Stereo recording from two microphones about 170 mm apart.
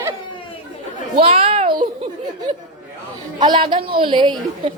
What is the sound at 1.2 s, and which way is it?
Children playing, 30° right (ahead or behind).